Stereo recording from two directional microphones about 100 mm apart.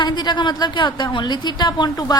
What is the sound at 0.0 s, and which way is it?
A woman's voice, 45° left (ahead or behind).